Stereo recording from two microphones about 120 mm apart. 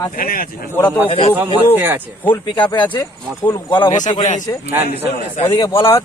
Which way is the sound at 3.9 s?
90° left.